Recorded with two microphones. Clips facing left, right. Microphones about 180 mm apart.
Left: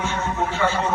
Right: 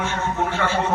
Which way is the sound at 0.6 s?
60° right (ahead or behind).